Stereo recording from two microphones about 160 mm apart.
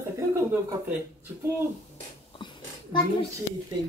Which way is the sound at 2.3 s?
30° left (ahead or behind).